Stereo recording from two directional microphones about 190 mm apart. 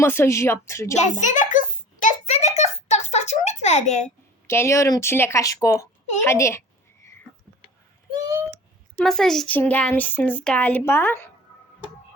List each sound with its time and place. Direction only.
0.0 s speech: 15° left (ahead or behind)
0.9 s a sound: 40° left (ahead or behind)
4.4 s speech: 15° left (ahead or behind)
9.0 s speech: 5° left (ahead or behind)